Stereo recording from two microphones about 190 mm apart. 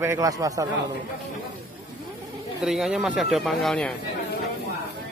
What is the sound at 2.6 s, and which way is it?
Speech, centre (ahead or behind).